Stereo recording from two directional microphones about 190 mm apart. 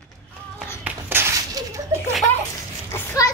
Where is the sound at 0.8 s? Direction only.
10° right (ahead or behind).